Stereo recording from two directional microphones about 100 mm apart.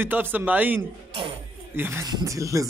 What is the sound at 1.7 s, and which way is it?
Music, 25° right (ahead or behind).